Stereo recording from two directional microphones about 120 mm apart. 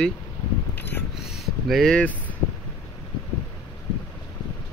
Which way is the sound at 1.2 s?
Centre (ahead or behind).